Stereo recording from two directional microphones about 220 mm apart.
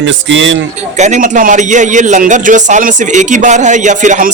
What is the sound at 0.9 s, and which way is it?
A man's voice, 35° right (ahead or behind).